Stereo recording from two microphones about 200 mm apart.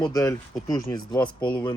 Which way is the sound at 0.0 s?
15° left (ahead or behind).